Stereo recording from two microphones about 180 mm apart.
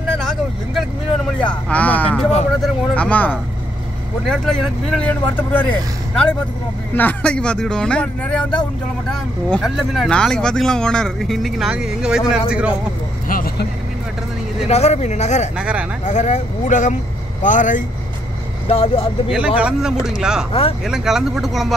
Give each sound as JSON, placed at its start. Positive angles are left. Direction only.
{"t": 0.2, "sound": "vehicle", "side_deg": 0}
{"t": 2.6, "sound": "speech", "side_deg": 5}
{"t": 7.0, "sound": "speech", "side_deg": 10}
{"t": 13.3, "sound": "vehicle", "side_deg": 55}
{"t": 14.7, "sound": "speech", "side_deg": 35}
{"t": 15.5, "sound": "speech", "side_deg": -5}
{"t": 16.1, "sound": "speech", "side_deg": 40}
{"t": 18.7, "sound": "speech", "side_deg": 35}
{"t": 19.3, "sound": "speech", "side_deg": -5}